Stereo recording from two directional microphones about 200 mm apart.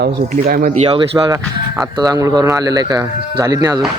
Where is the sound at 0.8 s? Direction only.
25° right (ahead or behind).